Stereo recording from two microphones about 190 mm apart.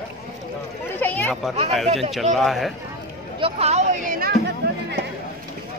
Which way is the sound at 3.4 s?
35° right (ahead or behind).